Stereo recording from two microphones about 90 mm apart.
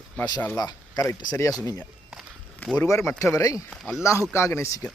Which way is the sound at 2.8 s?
35° left (ahead or behind).